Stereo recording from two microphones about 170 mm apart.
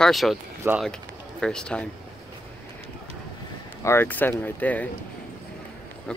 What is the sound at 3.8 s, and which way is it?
Speech, 15° left (ahead or behind).